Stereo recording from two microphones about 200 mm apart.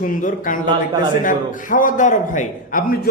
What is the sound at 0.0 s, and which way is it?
Speech, 40° left (ahead or behind).